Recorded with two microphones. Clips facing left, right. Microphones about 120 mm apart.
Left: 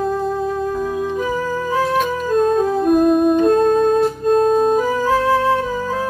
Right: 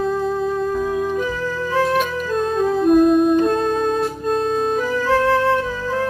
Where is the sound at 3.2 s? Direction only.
45° left (ahead or behind).